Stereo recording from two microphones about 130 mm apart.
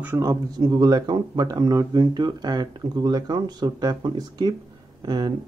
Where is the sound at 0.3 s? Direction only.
30° right (ahead or behind).